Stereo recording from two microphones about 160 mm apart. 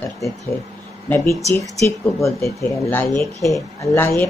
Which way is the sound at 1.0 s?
15° left (ahead or behind).